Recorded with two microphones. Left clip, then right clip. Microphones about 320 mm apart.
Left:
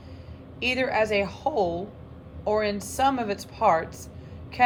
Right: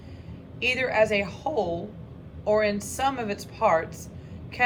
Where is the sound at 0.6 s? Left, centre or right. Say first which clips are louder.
Right 1 dB; centre.